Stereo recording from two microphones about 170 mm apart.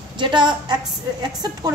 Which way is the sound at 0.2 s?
25° right (ahead or behind).